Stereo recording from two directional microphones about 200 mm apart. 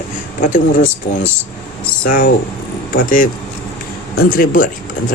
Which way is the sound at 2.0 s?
45° left (ahead or behind).